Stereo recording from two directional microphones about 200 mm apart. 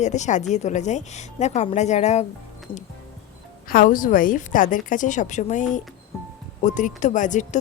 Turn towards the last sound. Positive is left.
turn(degrees=40)  # may be behind; listen again after turning